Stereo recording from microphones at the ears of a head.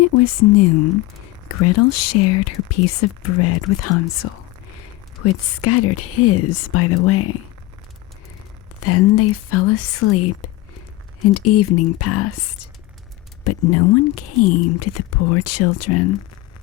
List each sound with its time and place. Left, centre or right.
0.0 s speech: left
8.8 s speech: left